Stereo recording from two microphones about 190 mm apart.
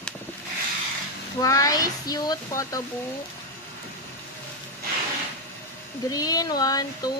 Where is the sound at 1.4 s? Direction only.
15° left (ahead or behind).